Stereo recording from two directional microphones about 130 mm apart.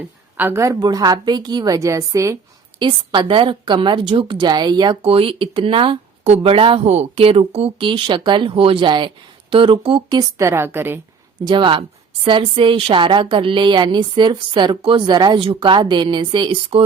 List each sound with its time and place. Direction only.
0.3 s a woman's voice: 15° right (ahead or behind)
2.8 s a woman's voice: 40° right (ahead or behind)
5.0 s a woman's voice: 45° right (ahead or behind); by 11.0 s 15° right (ahead or behind)
11.4 s a woman's voice: 40° right (ahead or behind)